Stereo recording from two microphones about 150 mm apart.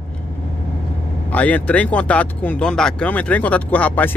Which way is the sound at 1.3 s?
10° left (ahead or behind).